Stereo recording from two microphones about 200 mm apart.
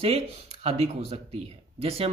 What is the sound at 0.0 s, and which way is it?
Speech, 30° right (ahead or behind).